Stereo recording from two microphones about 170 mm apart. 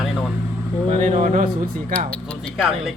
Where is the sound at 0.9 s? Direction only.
45° right (ahead or behind).